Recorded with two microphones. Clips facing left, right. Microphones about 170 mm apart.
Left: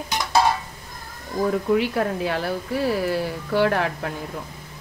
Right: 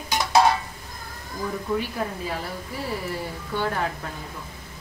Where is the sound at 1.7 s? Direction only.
75° left (ahead or behind).